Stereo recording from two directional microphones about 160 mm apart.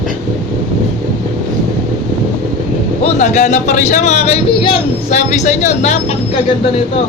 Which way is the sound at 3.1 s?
50° left (ahead or behind).